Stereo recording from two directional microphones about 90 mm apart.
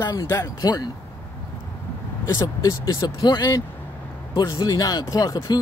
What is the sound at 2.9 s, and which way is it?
Speech, 45° left (ahead or behind).